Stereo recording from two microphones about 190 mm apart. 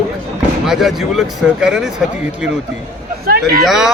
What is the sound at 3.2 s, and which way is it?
Speech, 50° right (ahead or behind).